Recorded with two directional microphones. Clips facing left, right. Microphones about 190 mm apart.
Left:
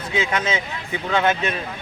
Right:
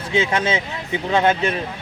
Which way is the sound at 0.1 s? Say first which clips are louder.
Right 3 dB; 30° right (ahead or behind).